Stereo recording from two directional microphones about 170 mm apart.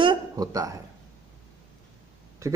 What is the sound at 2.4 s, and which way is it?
Speech, 20° right (ahead or behind).